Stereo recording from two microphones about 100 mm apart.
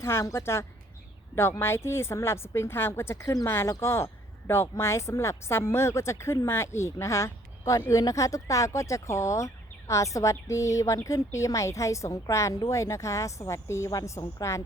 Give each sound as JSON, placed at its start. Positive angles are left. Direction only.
{"t": 0.0, "sound": "speech", "side_deg": 25}